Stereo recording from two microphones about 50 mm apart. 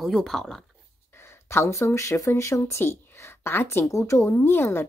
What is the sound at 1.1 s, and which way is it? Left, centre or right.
Speech, left.